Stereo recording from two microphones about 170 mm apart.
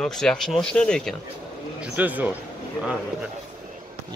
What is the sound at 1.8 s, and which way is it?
Speech, 10° right (ahead or behind).